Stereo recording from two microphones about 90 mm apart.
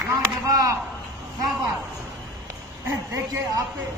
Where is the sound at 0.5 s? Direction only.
40° right (ahead or behind).